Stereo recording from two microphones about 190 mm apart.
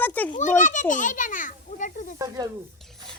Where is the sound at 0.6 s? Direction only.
40° left (ahead or behind).